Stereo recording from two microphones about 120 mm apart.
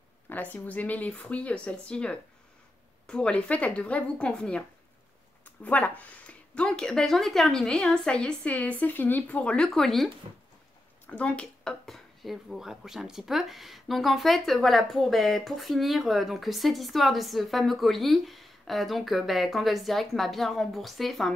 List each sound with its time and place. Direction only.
0.3 s speech: 15° left (ahead or behind)
10.3 s speech: 60° right (ahead or behind)
11.1 s speech: 10° left (ahead or behind)